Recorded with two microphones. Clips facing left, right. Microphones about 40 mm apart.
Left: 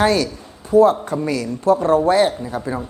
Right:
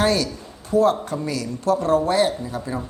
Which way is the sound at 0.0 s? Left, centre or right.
Centre.